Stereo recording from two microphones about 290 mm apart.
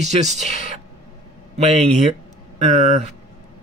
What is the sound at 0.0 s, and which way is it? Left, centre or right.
Speech, right.